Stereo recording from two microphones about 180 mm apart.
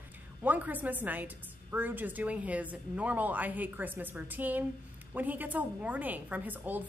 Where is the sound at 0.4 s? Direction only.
10° right (ahead or behind).